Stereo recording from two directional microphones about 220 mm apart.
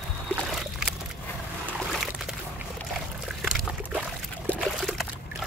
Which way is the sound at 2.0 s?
Centre (ahead or behind).